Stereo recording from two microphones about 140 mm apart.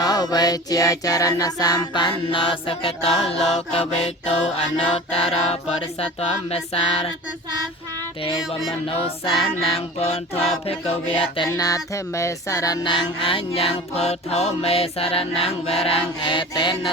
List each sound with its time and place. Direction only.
0.0 s music: 30° left (ahead or behind); by 7.1 s 45° left (ahead or behind)
9.4 s music: 45° left (ahead or behind)
11.5 s music: 25° left (ahead or behind)